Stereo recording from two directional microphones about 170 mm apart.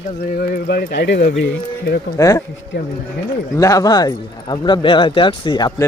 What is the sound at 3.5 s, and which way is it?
Speech, 20° left (ahead or behind).